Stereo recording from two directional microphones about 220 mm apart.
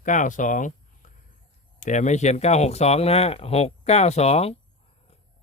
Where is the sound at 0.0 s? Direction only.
35° left (ahead or behind).